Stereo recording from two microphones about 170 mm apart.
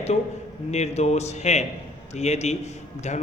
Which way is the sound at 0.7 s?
40° left (ahead or behind).